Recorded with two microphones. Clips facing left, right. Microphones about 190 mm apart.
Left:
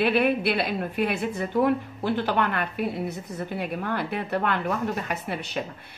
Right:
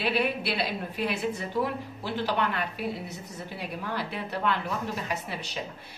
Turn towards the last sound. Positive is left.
turn(degrees=55)  # may be behind; listen again after turning